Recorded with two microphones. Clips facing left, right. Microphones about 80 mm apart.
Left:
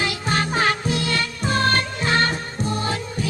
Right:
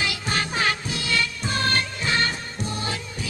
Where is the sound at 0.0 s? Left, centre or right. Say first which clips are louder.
Left 4 dB; left.